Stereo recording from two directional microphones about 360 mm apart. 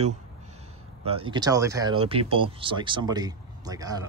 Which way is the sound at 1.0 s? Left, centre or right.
Centre.